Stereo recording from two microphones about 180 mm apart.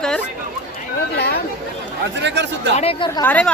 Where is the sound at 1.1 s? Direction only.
65° left (ahead or behind).